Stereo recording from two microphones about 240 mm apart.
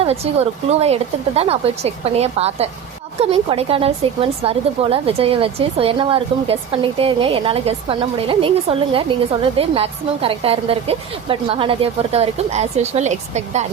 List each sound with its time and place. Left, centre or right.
0.0 s a woman's voice: right